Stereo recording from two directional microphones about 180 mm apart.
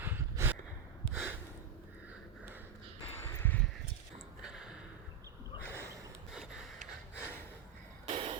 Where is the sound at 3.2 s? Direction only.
10° left (ahead or behind).